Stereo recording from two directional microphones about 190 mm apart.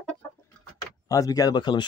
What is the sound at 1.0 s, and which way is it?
Speech, 20° left (ahead or behind).